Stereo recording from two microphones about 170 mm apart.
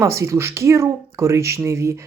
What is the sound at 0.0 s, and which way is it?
Speech, 15° right (ahead or behind).